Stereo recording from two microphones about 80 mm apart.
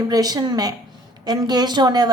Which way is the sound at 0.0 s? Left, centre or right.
Right.